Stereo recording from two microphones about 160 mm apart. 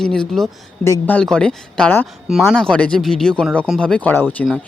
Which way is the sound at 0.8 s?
15° left (ahead or behind).